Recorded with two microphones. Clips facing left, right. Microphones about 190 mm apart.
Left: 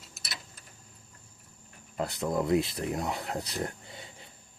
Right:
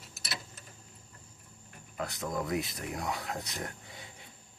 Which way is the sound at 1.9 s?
30° left (ahead or behind).